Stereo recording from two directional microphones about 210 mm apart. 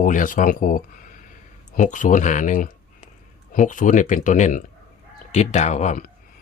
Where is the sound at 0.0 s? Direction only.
40° left (ahead or behind).